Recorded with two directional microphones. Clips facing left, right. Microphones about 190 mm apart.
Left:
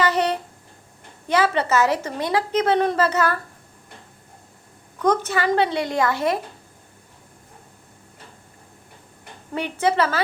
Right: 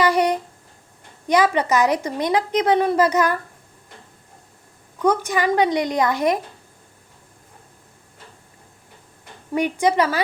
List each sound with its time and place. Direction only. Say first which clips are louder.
0.0 s a sound: right 3 dB; 10° right (ahead or behind)
1.3 s a woman's voice: right 2 dB; 15° right (ahead or behind)
5.0 s a woman's voice: right 1 dB; 10° right (ahead or behind)
9.6 s a woman's voice: right 2 dB; 15° right (ahead or behind)